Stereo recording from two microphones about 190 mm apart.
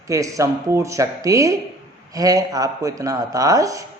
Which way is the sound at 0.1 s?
15° right (ahead or behind).